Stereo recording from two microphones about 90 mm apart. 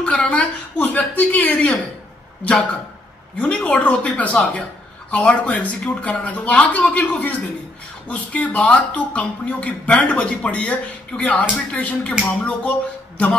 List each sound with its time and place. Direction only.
0.0 s speech: 15° left (ahead or behind)
3.3 s speech: 15° left (ahead or behind)